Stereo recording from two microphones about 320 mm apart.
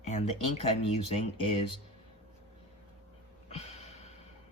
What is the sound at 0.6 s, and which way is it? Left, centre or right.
Speech, centre.